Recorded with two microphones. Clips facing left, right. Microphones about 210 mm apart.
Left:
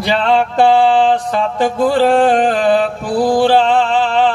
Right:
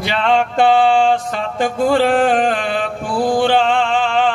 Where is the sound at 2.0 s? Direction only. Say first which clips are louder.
Left 3 dB; 35° left (ahead or behind).